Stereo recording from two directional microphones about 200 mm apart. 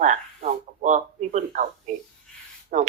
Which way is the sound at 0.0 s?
40° right (ahead or behind).